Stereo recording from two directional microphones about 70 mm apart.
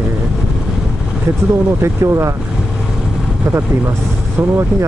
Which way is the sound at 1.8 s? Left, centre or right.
Right.